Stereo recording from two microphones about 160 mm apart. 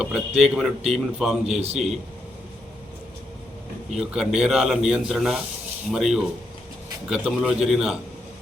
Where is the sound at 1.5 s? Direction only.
40° right (ahead or behind).